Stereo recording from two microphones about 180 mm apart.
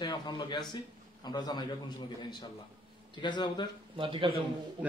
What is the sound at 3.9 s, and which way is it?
Speech, 25° right (ahead or behind).